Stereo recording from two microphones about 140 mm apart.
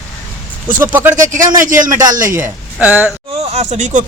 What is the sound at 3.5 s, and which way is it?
Speech, 55° right (ahead or behind).